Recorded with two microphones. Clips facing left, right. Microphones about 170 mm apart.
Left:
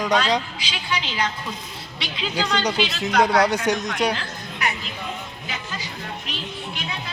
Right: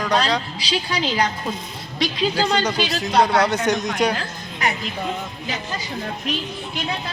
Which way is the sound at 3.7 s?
10° left (ahead or behind).